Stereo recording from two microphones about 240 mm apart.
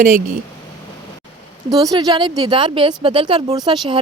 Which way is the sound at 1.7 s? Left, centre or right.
Centre.